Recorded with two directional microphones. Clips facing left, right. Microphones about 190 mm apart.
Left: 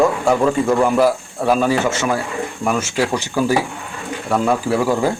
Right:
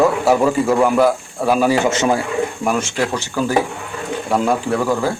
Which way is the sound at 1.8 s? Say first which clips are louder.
Right 3 dB; 20° right (ahead or behind).